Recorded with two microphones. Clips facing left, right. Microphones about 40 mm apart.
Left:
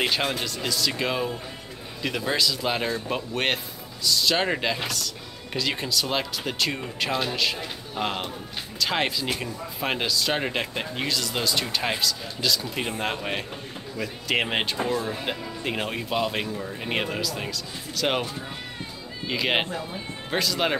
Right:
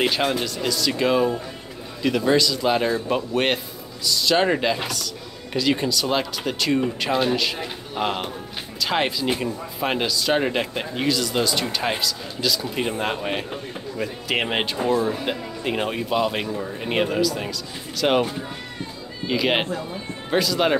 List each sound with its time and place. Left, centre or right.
0.0 s speech: centre
8.0 s speech: centre
8.7 s speech: centre